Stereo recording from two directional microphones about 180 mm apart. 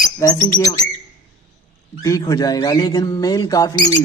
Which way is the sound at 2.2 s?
20° left (ahead or behind).